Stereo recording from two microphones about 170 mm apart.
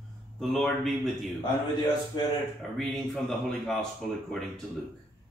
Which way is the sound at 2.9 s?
Centre (ahead or behind).